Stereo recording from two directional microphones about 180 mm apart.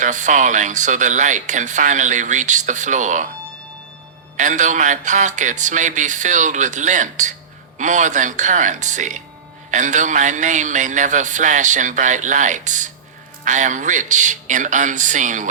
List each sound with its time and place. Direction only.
0.0 s speech: 45° right (ahead or behind)
4.4 s speech: 45° right (ahead or behind)